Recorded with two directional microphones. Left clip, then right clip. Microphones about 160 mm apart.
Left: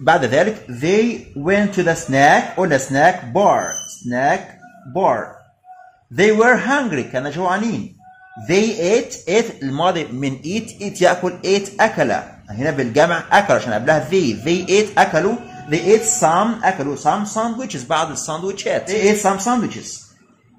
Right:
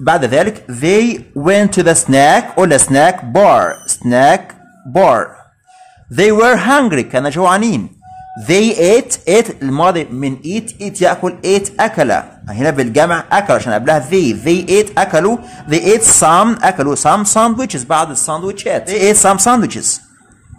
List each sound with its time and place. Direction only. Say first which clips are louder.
0.0 s speech: right 3 dB; 35° right (ahead or behind)
15.7 s speech: right 4 dB; 65° right (ahead or behind); by 18.9 s 40° right (ahead or behind)
18.9 s speech: right 6 dB; 70° right (ahead or behind)